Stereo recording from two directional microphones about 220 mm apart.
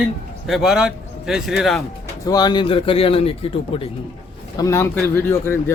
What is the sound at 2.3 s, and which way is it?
Speech, 20° left (ahead or behind).